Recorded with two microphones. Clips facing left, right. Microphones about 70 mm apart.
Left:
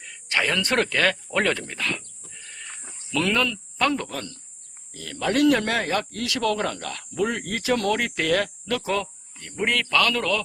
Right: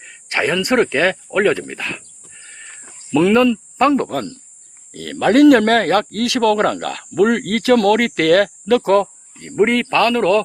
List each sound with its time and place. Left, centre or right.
0.0 s a sound: right
0.5 s speech: centre
3.9 s speech: right
4.9 s speech: right
8.6 s speech: right
9.4 s speech: right